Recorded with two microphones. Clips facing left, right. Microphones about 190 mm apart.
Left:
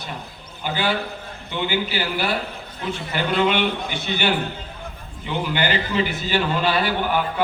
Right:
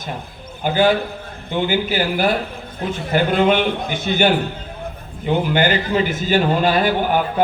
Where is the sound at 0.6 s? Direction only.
50° right (ahead or behind).